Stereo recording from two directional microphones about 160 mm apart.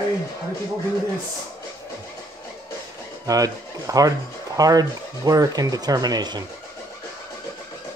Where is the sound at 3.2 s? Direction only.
20° right (ahead or behind).